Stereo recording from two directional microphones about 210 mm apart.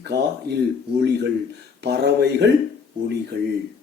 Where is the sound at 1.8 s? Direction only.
50° right (ahead or behind).